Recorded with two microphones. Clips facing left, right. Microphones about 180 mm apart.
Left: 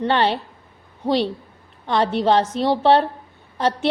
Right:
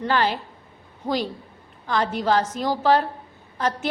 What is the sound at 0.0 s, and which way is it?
A woman's voice, 30° left (ahead or behind).